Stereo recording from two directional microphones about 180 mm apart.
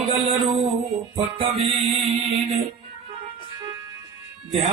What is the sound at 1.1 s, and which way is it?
Music, 30° right (ahead or behind).